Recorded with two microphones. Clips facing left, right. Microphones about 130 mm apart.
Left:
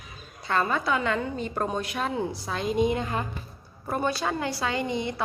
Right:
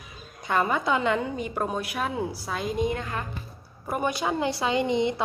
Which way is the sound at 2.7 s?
20° left (ahead or behind).